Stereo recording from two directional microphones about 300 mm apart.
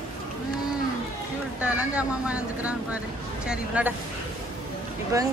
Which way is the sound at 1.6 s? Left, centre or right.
Centre.